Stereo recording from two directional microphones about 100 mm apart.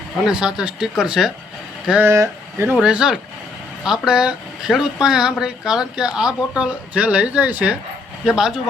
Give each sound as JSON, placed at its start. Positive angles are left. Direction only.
{"t": 0.3, "sound": "speech", "side_deg": -10}
{"t": 2.0, "sound": "speech", "side_deg": -30}
{"t": 2.8, "sound": "speech", "side_deg": -10}